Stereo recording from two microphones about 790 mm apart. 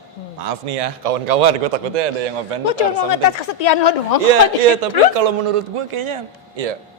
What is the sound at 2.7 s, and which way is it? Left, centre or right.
Speech, left.